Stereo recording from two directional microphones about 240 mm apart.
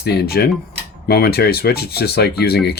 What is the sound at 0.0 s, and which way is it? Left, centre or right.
Speech, left.